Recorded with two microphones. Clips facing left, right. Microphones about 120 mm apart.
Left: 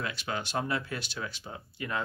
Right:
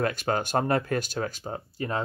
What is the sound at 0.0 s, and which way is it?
Speech, 45° right (ahead or behind).